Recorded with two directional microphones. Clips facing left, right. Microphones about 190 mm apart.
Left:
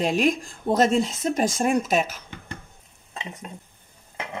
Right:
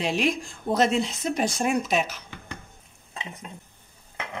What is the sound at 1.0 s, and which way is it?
Speech, 45° left (ahead or behind).